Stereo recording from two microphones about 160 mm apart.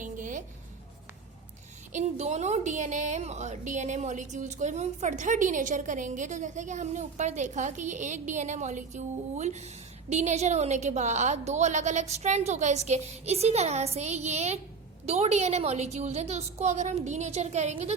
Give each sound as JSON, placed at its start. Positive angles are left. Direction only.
{"t": 0.0, "sound": "music", "side_deg": -55}
{"t": 1.9, "sound": "a woman's voice", "side_deg": -45}